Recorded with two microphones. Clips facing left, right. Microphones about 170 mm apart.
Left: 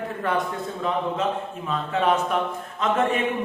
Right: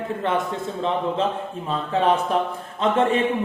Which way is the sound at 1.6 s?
30° right (ahead or behind).